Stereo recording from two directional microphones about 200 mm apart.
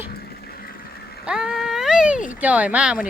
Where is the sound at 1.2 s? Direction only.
5° right (ahead or behind).